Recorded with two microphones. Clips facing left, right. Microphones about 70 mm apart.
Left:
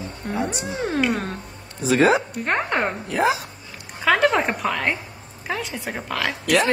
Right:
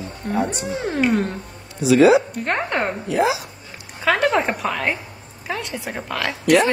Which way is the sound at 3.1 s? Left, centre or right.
Left.